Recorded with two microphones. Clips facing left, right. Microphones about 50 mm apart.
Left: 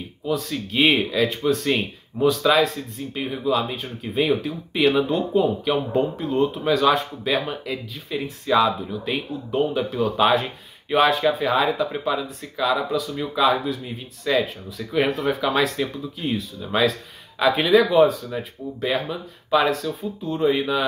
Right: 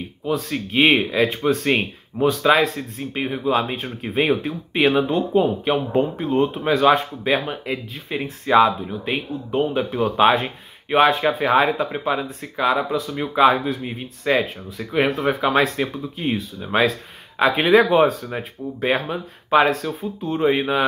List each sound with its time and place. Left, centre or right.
0.3 s speech: right
11.3 s speech: right